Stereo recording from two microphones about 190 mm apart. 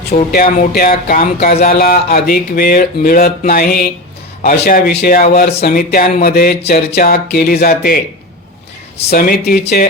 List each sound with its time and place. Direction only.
0.3 s speech: 50° left (ahead or behind)
9.0 s speech: 50° left (ahead or behind)